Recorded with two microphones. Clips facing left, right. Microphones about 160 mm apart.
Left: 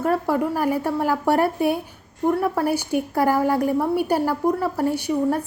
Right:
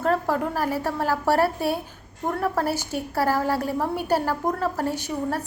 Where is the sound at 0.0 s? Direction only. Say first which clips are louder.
Left 2 dB; 15° left (ahead or behind).